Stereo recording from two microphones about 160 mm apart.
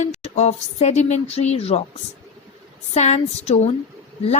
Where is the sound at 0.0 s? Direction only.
45° left (ahead or behind).